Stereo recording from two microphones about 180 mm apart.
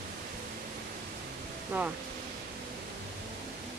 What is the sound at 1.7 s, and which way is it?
Speech, 10° right (ahead or behind).